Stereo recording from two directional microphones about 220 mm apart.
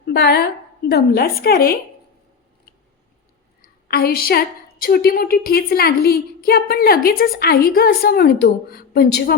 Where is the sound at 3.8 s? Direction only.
45° left (ahead or behind).